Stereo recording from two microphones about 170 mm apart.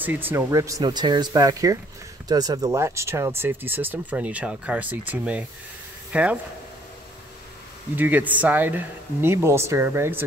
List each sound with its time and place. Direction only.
0.0 s speech: 10° right (ahead or behind)
7.9 s speech: 10° right (ahead or behind)